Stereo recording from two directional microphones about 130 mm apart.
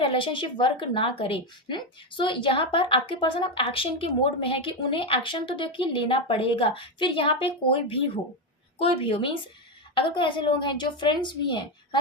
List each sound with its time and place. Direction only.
0.0 s a woman's voice: 40° left (ahead or behind)